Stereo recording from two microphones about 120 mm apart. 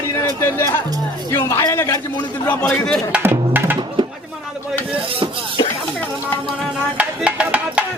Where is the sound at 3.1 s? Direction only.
15° right (ahead or behind).